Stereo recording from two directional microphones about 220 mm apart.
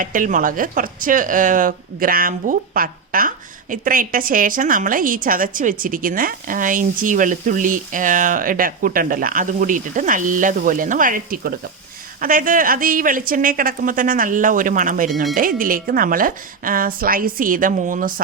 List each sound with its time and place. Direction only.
0.0 s speech: 35° right (ahead or behind)